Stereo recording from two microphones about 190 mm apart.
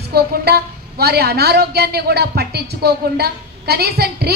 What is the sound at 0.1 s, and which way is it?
A woman's voice, 55° right (ahead or behind).